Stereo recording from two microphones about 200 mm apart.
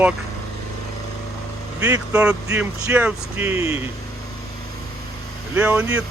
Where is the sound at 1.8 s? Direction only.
10° right (ahead or behind).